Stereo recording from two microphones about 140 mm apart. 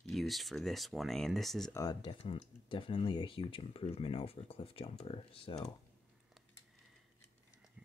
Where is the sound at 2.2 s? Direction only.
40° left (ahead or behind).